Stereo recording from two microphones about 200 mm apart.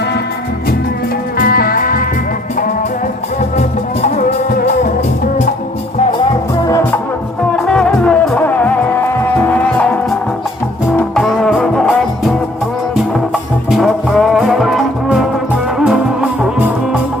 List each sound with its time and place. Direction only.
1.4 s music: 45° left (ahead or behind)
4.0 s music: 35° left (ahead or behind)
6.7 s music: 15° left (ahead or behind)
7.5 s music: 5° left (ahead or behind)
13.7 s music: centre (ahead or behind)